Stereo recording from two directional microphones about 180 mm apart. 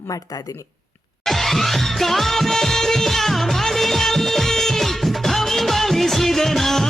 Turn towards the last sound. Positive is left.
turn(degrees=0)  # may be behind; listen again after turning